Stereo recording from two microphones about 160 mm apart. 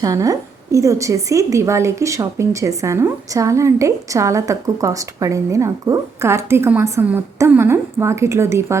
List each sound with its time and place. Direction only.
0.0 s a woman's voice: 20° right (ahead or behind)